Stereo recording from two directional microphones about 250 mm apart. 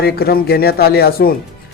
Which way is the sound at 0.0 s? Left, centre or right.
Left.